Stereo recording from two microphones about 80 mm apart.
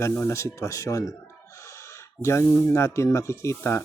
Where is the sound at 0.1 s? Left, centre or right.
Left.